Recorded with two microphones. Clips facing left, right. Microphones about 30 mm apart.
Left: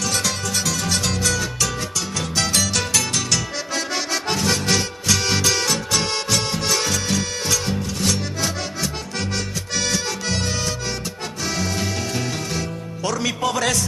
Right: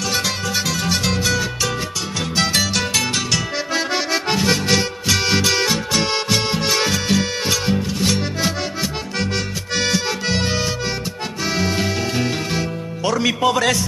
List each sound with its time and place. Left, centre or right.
0.1 s music: centre
9.8 s music: right